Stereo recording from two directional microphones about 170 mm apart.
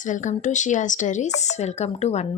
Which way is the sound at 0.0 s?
45° left (ahead or behind).